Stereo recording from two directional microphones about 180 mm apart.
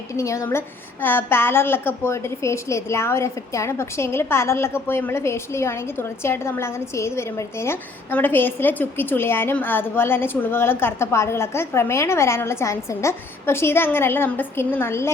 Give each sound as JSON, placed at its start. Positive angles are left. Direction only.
{"t": 0.1, "sound": "a woman's voice", "side_deg": 15}